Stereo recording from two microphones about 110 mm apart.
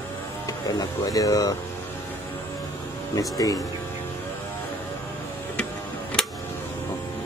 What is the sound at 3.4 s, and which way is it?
Speech, 30° left (ahead or behind).